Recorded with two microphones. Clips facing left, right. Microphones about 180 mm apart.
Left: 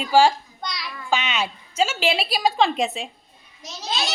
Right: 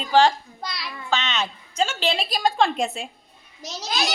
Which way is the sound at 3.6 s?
40° right (ahead or behind).